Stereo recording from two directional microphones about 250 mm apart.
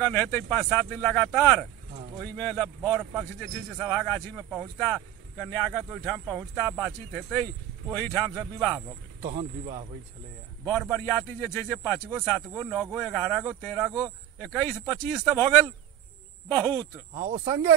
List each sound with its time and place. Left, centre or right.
0.0 s a man's voice: centre
9.2 s speech: right
10.6 s a man's voice: centre
17.5 s speech: centre